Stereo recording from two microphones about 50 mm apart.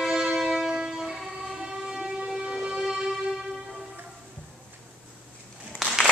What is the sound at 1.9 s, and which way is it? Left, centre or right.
Train, centre.